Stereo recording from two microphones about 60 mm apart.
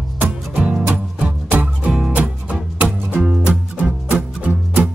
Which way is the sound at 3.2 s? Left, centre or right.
Centre.